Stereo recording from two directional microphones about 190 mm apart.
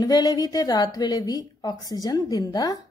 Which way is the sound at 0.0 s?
20° left (ahead or behind).